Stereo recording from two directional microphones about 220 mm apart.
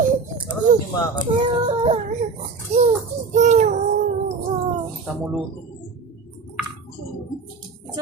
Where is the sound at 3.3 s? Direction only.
35° right (ahead or behind).